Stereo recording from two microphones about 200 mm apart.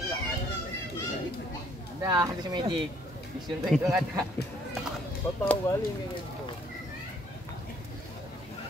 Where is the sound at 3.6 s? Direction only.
Centre (ahead or behind).